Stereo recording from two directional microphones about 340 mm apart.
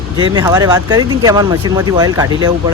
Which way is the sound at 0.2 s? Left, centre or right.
Centre.